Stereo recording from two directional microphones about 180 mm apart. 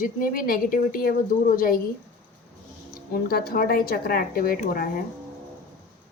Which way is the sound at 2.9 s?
60° left (ahead or behind).